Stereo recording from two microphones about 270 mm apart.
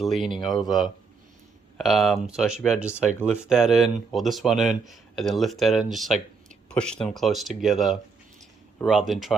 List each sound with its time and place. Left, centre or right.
0.0 s speech: centre